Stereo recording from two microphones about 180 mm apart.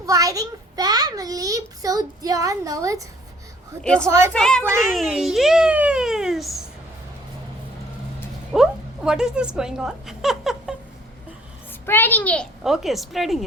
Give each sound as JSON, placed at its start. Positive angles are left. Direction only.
{"t": 0.0, "sound": "a child's voice", "side_deg": -20}
{"t": 3.8, "sound": "a child's voice", "side_deg": 5}
{"t": 8.5, "sound": "a woman's voice", "side_deg": -5}
{"t": 11.9, "sound": "a child's voice", "side_deg": 10}